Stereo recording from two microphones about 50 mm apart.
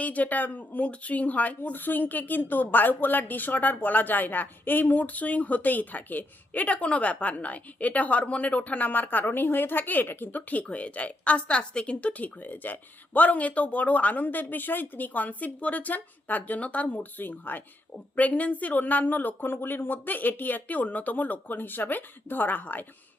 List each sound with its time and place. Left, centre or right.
0.0 s speech: left
10.5 s speech: left